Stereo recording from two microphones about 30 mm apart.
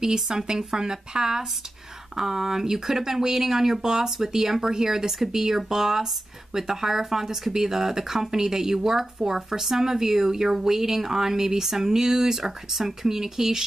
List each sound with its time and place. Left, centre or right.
0.0 s speech: centre